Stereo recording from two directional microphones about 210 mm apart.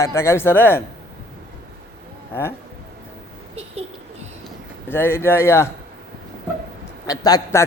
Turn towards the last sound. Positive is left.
turn(degrees=15)  # may be behind; listen again after turning